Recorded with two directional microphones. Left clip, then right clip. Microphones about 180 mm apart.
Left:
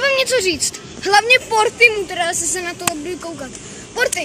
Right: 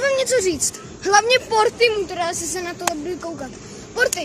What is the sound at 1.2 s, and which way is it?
Speech, centre (ahead or behind).